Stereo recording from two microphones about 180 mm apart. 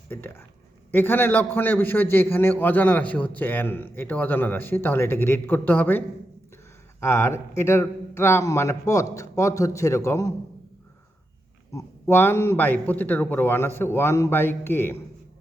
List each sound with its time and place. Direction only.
0.1 s a man's voice: 10° left (ahead or behind)
7.0 s a man's voice: 15° left (ahead or behind)
11.7 s a man's voice: 15° left (ahead or behind)